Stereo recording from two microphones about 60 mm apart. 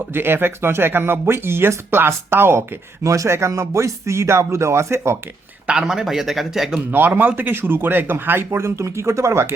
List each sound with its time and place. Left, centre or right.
0.1 s speech: right
5.7 s speech: centre
7.2 s speech: right
8.5 s speech: right